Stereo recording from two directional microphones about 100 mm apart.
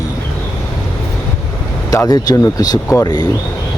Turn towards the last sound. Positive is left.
turn(degrees=40)  # may be behind; listen again after turning